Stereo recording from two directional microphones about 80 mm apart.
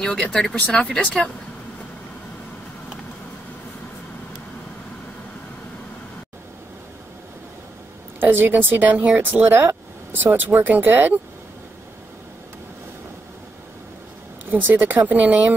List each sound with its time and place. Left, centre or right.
0.0 s speech: centre
8.2 s speech: right
14.5 s speech: right